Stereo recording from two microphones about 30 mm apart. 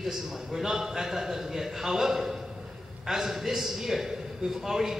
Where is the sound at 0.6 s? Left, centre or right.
Centre.